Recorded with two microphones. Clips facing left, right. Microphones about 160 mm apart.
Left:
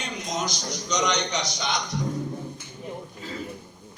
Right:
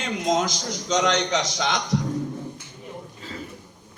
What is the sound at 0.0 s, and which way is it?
A man's voice, 90° right.